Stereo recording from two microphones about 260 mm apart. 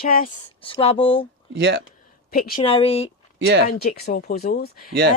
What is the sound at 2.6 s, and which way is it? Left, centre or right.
Speech, left.